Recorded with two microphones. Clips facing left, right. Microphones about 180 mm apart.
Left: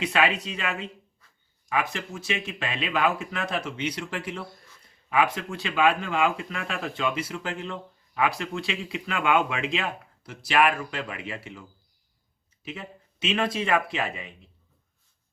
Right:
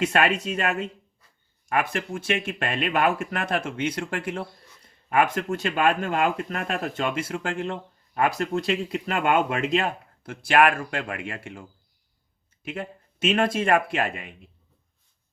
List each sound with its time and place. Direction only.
0.0 s speech: 50° right (ahead or behind)
12.6 s speech: 50° right (ahead or behind)